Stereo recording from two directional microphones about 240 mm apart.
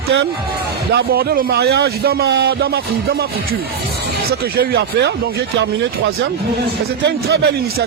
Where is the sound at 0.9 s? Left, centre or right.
Right.